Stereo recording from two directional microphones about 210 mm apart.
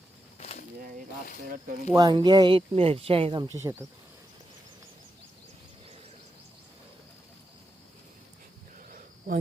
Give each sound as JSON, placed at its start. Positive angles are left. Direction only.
{"t": 0.3, "sound": "a sound", "side_deg": 35}
{"t": 1.9, "sound": "speech", "side_deg": -20}
{"t": 8.9, "sound": "cricket", "side_deg": -40}